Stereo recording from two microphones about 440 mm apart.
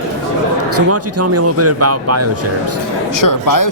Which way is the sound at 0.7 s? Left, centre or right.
Right.